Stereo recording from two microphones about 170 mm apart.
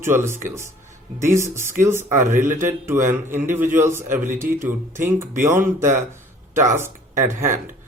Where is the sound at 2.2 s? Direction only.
45° right (ahead or behind).